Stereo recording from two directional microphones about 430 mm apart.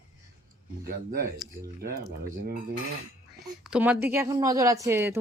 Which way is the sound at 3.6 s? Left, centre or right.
Centre.